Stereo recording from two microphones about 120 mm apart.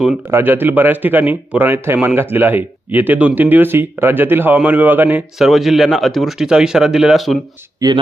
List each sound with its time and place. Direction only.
0.0 s speech: 5° right (ahead or behind)
0.3 s speech: 20° right (ahead or behind)
5.4 s speech: centre (ahead or behind)